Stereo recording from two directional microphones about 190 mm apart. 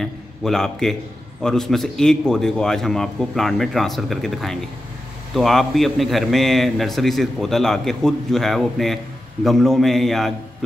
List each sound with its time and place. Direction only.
0.0 s a man's voice: centre (ahead or behind)